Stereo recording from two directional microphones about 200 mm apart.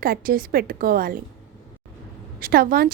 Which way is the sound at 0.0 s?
45° right (ahead or behind).